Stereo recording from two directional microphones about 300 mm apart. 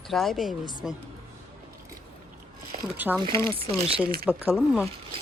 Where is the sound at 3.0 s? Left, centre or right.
Centre.